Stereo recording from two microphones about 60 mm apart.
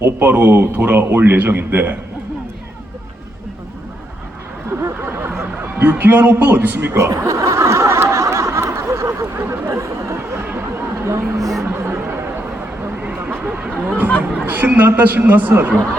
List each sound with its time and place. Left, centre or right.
0.0 s a man's voice: right
4.8 s a sound: right
6.9 s snicker: right
9.6 s chatter: right
11.0 s speech: right
11.6 s music: right
13.0 s a sound: right
13.8 s a man's voice: right